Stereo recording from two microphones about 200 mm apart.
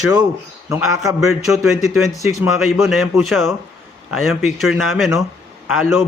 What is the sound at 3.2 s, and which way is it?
A man's voice, centre (ahead or behind).